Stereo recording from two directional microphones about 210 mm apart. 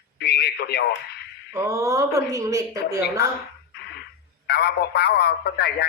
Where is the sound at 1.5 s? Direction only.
15° right (ahead or behind).